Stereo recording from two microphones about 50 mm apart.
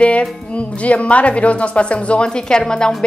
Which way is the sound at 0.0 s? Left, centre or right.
Left.